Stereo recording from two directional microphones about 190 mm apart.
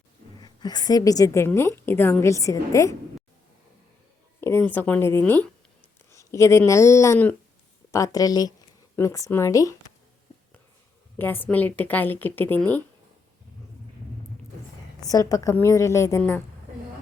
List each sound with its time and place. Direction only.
0.3 s a woman's voice: 20° left (ahead or behind)
4.4 s a woman's voice: 10° left (ahead or behind)
11.2 s a woman's voice: 10° left (ahead or behind)
15.1 s a woman's voice: 20° left (ahead or behind)